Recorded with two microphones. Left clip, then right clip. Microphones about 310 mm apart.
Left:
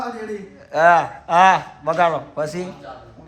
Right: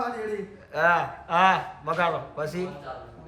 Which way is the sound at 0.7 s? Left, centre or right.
Centre.